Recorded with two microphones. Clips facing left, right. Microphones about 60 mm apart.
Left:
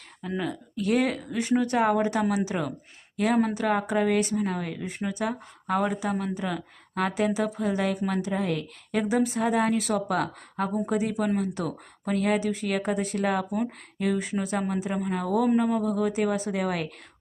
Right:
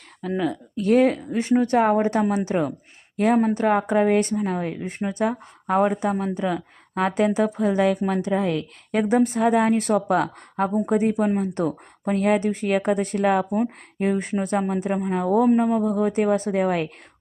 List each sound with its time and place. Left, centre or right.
0.2 s speech: right
8.2 s a woman's voice: right
13.5 s speech: right
16.3 s a woman's voice: right